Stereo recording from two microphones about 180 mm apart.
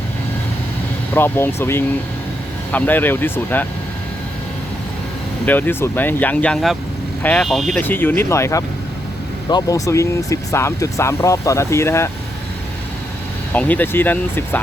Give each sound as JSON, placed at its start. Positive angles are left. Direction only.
{"t": 1.1, "sound": "speech", "side_deg": 10}
{"t": 5.5, "sound": "speech", "side_deg": 10}
{"t": 13.5, "sound": "speech", "side_deg": 10}